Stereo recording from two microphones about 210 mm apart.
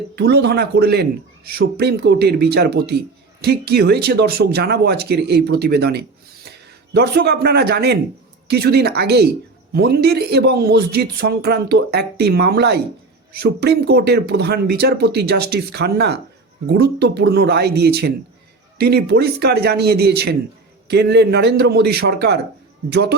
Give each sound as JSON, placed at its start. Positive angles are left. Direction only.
{"t": 0.2, "sound": "speech", "side_deg": -50}